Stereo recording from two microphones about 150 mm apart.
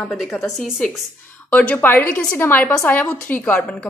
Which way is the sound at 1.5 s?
10° left (ahead or behind).